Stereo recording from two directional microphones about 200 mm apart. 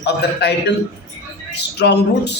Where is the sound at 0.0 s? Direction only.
60° left (ahead or behind).